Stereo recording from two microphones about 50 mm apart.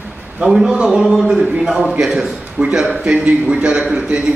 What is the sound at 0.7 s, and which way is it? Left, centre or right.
A man's voice, centre.